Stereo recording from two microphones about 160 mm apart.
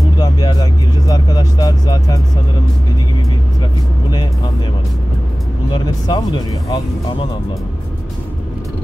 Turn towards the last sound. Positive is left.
turn(degrees=25)  # may be behind; listen again after turning